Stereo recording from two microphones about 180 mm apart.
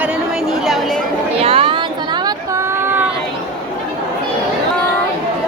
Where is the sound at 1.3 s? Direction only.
30° right (ahead or behind).